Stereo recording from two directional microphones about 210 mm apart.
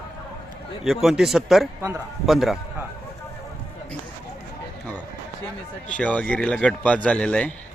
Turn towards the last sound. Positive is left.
turn(degrees=5)  # may be behind; listen again after turning